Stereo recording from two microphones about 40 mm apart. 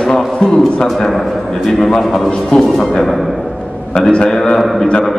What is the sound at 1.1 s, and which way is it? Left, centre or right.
A man's voice, centre.